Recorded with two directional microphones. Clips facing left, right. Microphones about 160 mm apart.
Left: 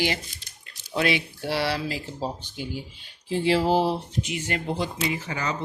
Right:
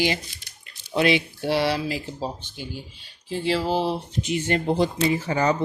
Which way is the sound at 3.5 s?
15° left (ahead or behind).